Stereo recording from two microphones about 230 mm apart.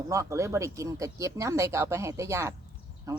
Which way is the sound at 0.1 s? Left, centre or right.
Centre.